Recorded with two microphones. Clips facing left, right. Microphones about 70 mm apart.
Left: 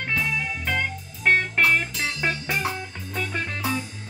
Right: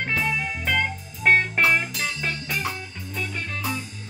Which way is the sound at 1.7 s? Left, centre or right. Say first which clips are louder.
Even; centre.